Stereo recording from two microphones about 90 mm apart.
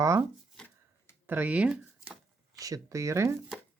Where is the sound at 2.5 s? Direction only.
40° right (ahead or behind).